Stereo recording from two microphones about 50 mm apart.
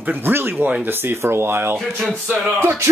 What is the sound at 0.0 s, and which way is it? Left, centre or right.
Speech, right.